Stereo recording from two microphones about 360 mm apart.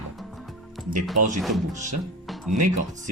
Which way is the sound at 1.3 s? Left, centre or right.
Centre.